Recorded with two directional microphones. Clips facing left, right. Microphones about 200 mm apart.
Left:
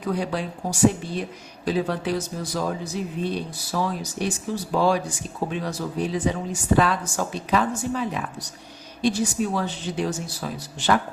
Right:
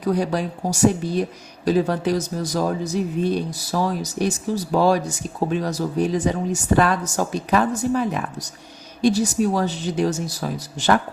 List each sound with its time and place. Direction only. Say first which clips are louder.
0.0 s speech: right 5 dB; 40° right (ahead or behind)